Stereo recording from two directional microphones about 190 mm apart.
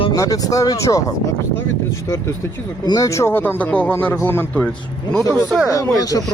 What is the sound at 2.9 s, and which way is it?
A man's voice, 20° left (ahead or behind).